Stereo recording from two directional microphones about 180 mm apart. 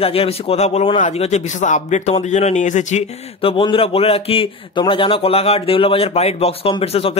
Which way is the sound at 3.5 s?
30° left (ahead or behind).